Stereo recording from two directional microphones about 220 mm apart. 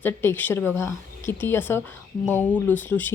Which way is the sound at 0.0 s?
10° left (ahead or behind).